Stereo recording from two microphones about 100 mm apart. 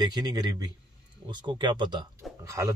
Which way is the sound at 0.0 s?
40° right (ahead or behind).